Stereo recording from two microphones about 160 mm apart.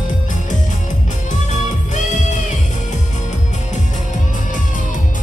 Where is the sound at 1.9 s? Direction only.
50° left (ahead or behind).